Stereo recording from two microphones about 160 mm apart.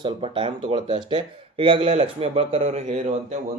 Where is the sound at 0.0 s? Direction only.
35° right (ahead or behind).